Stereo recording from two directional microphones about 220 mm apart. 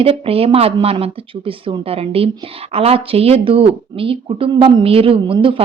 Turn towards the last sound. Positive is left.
turn(degrees=-25)  # may be behind; listen again after turning